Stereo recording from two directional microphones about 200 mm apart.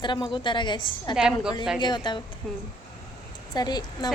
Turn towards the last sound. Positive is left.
turn(degrees=20)  # may be behind; listen again after turning